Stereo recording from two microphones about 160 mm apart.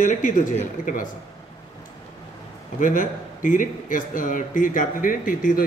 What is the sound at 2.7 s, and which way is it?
A man's voice, 55° left (ahead or behind).